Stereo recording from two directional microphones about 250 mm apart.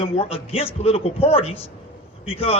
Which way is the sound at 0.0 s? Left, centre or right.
Left.